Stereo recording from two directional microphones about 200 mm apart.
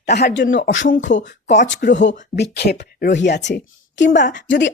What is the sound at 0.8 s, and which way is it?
Speech, 40° left (ahead or behind).